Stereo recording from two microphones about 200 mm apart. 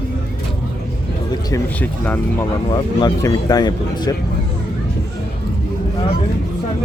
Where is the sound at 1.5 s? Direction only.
5° left (ahead or behind).